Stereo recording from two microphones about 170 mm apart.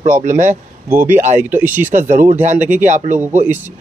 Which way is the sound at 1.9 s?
50° right (ahead or behind).